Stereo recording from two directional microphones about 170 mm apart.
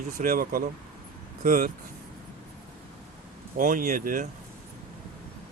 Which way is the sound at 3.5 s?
55° right (ahead or behind).